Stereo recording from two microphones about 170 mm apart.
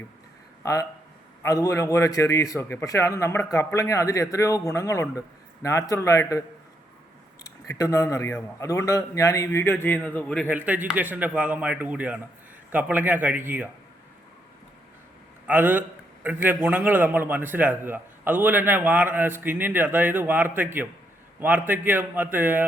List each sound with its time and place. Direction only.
0.6 s a man's voice: 20° left (ahead or behind)
7.4 s speech: 20° left (ahead or behind)
10.5 s a man's voice: 10° right (ahead or behind)
15.4 s a man's voice: 10° right (ahead or behind)